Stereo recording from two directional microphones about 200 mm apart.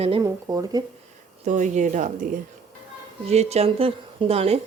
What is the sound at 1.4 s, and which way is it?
Speech, 35° right (ahead or behind).